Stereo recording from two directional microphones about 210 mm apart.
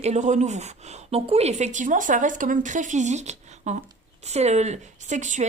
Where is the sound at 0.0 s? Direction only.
35° right (ahead or behind).